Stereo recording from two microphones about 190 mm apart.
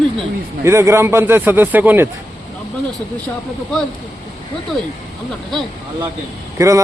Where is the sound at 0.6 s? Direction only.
15° right (ahead or behind).